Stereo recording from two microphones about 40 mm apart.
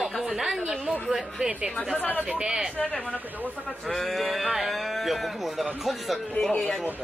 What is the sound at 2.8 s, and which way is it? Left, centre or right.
Speech, left.